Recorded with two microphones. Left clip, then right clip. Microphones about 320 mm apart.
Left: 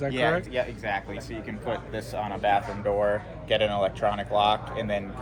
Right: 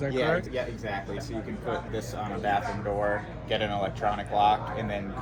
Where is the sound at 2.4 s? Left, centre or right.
Left.